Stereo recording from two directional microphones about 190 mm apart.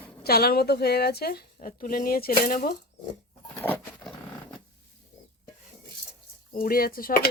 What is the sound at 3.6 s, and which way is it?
Patter, 10° left (ahead or behind).